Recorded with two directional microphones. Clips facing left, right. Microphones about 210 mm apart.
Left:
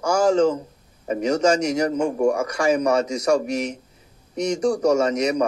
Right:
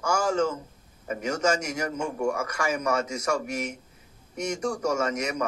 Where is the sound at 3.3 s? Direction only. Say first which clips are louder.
Left 8 dB; 15° left (ahead or behind).